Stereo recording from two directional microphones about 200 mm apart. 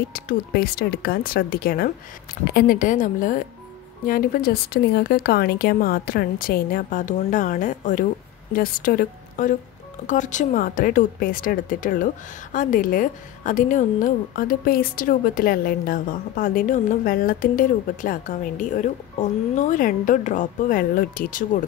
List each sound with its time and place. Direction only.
0.1 s a woman's voice: 45° left (ahead or behind)